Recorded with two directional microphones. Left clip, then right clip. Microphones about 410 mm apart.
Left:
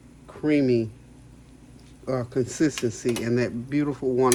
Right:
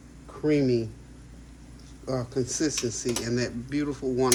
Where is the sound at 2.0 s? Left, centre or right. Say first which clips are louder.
Left 3 dB; left.